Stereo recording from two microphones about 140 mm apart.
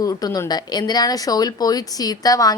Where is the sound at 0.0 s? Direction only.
25° left (ahead or behind).